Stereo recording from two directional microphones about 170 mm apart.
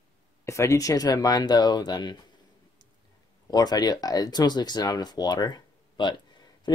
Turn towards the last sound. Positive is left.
turn(degrees=25)  # may be behind; listen again after turning